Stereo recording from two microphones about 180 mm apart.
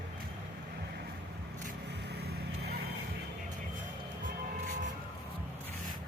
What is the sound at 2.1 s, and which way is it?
Vehicle, 65° right (ahead or behind).